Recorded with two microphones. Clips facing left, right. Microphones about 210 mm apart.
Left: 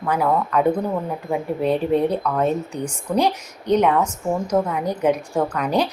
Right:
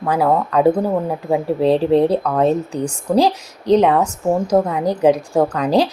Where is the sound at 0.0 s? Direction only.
40° right (ahead or behind).